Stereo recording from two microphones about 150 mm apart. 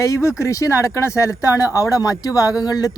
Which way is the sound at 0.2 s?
20° left (ahead or behind).